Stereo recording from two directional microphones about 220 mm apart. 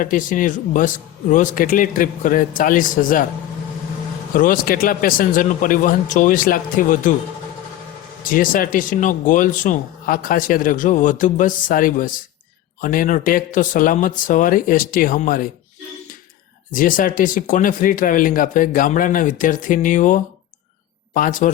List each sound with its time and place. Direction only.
0.0 s speech: 35° left (ahead or behind)
4.4 s speech: 40° left (ahead or behind)
8.2 s speech: 40° left (ahead or behind)
16.7 s speech: 40° left (ahead or behind)